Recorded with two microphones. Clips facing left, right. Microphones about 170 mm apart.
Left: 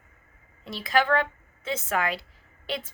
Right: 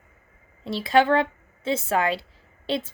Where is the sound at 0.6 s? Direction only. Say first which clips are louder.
Right 5 dB; 30° right (ahead or behind).